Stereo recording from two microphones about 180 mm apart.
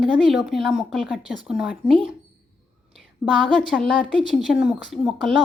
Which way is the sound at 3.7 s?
Centre (ahead or behind).